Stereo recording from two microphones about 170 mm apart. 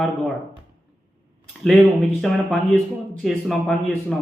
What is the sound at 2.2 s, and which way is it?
A man's voice, centre (ahead or behind).